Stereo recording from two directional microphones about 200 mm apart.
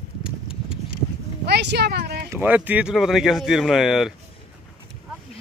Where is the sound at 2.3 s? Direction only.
10° right (ahead or behind).